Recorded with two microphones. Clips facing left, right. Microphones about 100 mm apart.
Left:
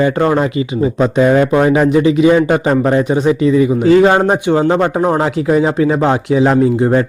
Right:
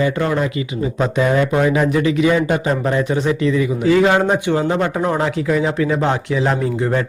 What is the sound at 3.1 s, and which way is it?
Speech, 20° left (ahead or behind).